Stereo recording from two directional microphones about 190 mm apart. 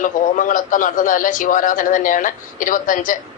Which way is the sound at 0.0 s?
45° left (ahead or behind).